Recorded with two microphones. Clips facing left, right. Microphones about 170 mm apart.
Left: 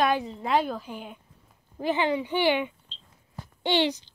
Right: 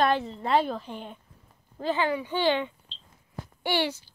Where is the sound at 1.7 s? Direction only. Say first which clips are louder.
Left 1 dB; 15° left (ahead or behind).